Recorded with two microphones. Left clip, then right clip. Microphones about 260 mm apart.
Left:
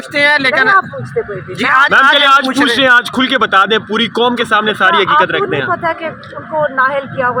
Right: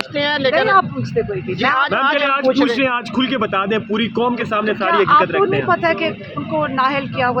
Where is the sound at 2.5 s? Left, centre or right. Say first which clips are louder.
Left 4 dB; left.